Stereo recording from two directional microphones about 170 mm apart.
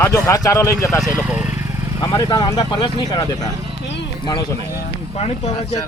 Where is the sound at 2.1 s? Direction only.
25° left (ahead or behind).